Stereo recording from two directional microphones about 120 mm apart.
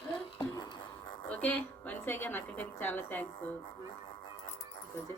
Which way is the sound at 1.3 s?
10° left (ahead or behind).